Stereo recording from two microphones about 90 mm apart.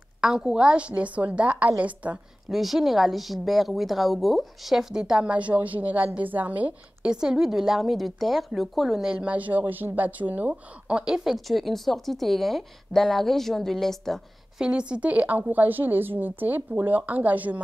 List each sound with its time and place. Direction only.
0.2 s a woman's voice: 5° right (ahead or behind)
2.5 s a woman's voice: centre (ahead or behind)
14.6 s speech: 10° right (ahead or behind)